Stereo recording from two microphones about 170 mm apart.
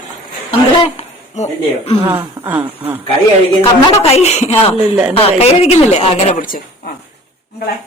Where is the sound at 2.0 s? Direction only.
15° right (ahead or behind).